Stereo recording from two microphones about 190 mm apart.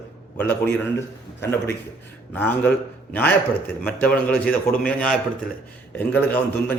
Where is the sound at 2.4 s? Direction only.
10° left (ahead or behind).